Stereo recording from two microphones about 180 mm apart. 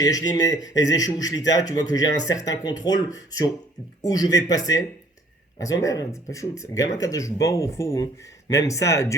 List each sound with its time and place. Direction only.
0.0 s a man's voice: 20° left (ahead or behind)